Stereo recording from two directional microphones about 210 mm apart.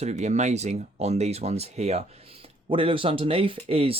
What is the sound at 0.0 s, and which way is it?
Speech, 35° right (ahead or behind).